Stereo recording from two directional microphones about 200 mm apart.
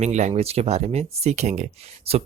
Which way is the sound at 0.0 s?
35° right (ahead or behind).